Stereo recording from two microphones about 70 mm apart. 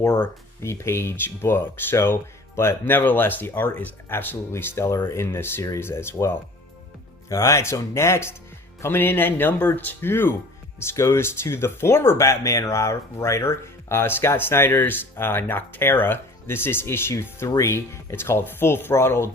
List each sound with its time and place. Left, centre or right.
0.6 s speech: left
4.5 s speech: left
10.8 s speech: left